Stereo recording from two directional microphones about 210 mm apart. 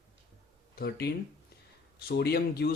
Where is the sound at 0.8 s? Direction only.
50° left (ahead or behind).